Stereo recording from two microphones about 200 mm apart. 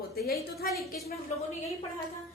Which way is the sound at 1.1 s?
30° left (ahead or behind).